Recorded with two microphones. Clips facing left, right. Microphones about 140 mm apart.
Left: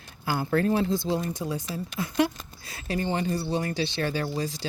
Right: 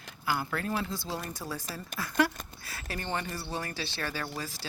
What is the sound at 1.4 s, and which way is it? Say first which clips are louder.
Speech: left 7 dB; 15° left (ahead or behind).